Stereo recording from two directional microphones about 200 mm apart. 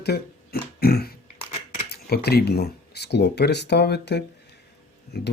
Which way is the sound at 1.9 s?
55° left (ahead or behind).